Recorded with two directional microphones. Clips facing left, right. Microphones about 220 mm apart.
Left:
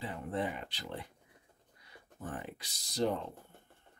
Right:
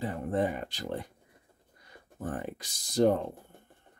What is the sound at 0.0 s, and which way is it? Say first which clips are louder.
Speech: right 7 dB; 45° right (ahead or behind).